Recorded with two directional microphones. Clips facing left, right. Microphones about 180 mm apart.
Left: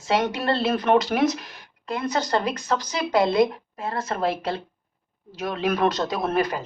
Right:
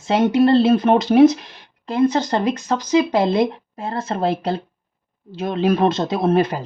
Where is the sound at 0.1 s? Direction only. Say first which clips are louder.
Right 8 dB; 25° right (ahead or behind).